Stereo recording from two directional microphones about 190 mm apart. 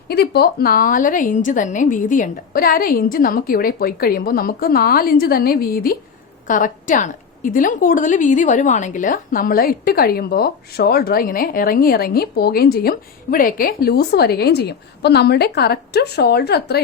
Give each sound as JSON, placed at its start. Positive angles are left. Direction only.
{"t": 0.1, "sound": "a woman's voice", "side_deg": 55}